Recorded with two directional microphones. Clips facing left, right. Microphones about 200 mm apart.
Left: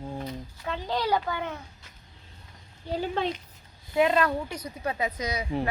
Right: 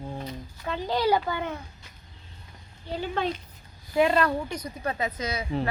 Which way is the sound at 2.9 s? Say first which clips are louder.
Left 1 dB; 40° left (ahead or behind).